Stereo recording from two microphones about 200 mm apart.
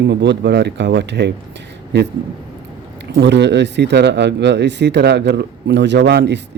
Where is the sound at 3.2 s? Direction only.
60° right (ahead or behind).